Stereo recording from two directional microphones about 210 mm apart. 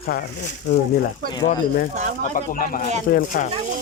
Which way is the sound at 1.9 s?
35° right (ahead or behind).